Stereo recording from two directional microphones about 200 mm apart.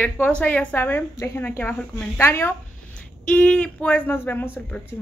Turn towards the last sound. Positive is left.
turn(degrees=10)  # may be behind; listen again after turning